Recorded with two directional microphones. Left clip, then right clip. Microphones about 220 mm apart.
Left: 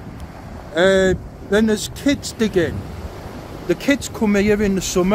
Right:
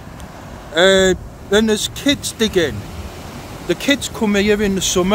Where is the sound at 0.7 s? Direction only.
15° right (ahead or behind).